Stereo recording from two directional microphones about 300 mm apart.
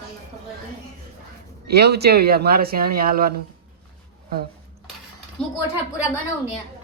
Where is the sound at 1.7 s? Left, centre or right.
Right.